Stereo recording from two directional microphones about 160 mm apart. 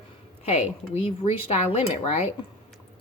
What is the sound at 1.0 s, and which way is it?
Speech, 40° left (ahead or behind).